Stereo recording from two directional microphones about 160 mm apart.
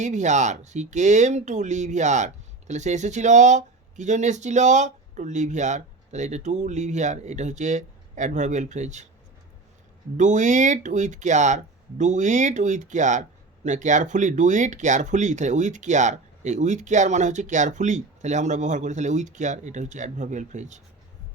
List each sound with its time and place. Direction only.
0.0 s speech: 50° right (ahead or behind)
10.2 s speech: 50° right (ahead or behind)